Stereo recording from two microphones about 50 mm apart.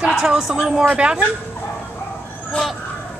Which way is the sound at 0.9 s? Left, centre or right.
Right.